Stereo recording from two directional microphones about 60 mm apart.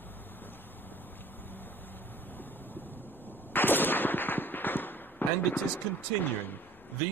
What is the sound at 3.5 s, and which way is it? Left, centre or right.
Gunshot, left.